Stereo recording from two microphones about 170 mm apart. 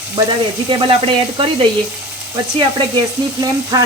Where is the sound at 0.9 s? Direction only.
30° right (ahead or behind).